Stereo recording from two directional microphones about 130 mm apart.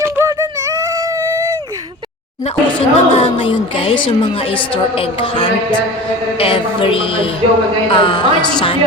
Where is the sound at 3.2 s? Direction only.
45° left (ahead or behind).